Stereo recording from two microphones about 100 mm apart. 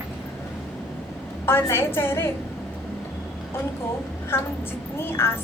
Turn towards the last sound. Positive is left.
turn(degrees=25)  # may be behind; listen again after turning